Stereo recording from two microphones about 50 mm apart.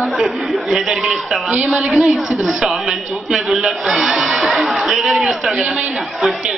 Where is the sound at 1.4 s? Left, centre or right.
Right.